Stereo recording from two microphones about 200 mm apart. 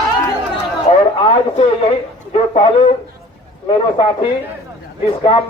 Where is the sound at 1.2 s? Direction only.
25° left (ahead or behind).